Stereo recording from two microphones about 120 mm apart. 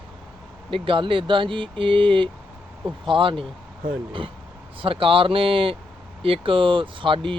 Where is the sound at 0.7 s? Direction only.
45° right (ahead or behind).